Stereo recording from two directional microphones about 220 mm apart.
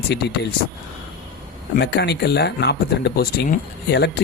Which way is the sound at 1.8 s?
50° left (ahead or behind).